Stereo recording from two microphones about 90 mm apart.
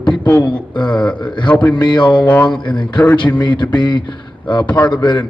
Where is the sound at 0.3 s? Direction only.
55° left (ahead or behind).